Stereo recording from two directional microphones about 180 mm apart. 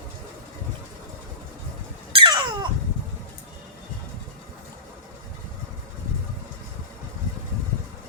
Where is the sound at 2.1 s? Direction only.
25° right (ahead or behind).